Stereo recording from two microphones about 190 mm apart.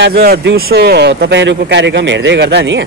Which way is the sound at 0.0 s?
55° right (ahead or behind).